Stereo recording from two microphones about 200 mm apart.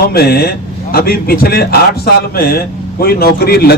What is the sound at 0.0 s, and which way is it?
A man's voice, 50° left (ahead or behind).